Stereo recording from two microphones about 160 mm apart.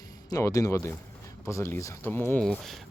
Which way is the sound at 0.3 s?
20° left (ahead or behind).